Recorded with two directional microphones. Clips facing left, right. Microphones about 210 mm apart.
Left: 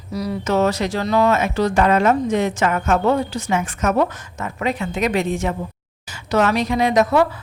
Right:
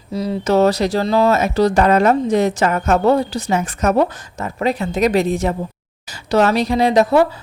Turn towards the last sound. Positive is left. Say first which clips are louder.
# right 3 dB
turn(degrees=-30)  # may be behind; listen again after turning